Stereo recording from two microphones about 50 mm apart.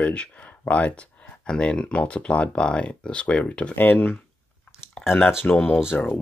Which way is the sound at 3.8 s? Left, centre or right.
Left.